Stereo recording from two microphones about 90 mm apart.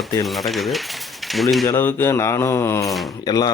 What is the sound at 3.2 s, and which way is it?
Speech, 45° left (ahead or behind).